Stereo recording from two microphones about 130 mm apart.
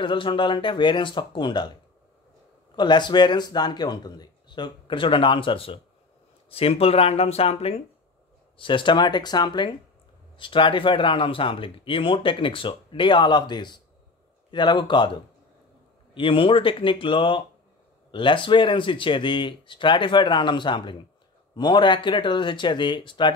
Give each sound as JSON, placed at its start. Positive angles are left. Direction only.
{"t": 0.0, "sound": "speech", "side_deg": 40}
{"t": 2.7, "sound": "speech", "side_deg": 35}
{"t": 8.5, "sound": "speech", "side_deg": 40}